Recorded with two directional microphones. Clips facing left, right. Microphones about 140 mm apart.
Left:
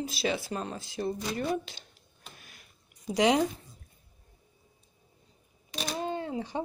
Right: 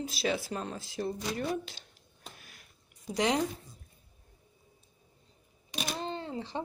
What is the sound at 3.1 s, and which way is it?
Speech, 15° left (ahead or behind).